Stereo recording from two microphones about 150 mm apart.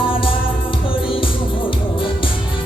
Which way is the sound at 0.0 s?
35° left (ahead or behind).